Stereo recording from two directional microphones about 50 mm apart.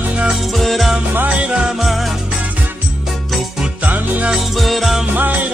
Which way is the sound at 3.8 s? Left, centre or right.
Right.